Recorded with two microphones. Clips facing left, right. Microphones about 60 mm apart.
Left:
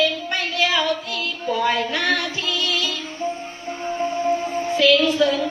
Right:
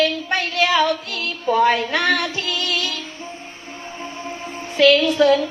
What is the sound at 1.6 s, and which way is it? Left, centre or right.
Child singing, right.